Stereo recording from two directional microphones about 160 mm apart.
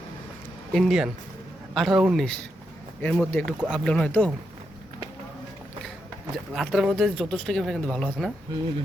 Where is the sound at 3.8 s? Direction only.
5° left (ahead or behind).